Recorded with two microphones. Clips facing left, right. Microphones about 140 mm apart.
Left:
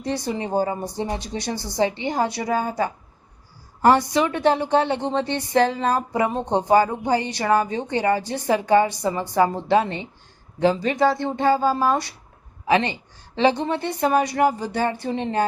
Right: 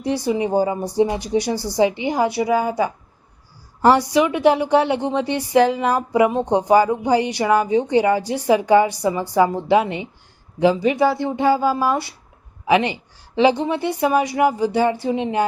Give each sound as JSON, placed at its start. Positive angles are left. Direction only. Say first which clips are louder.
{"t": 0.3, "sound": "speech", "louder": "right 5 dB", "side_deg": -10}
{"t": 4.1, "sound": "a woman's voice", "louder": "right 4 dB", "side_deg": -15}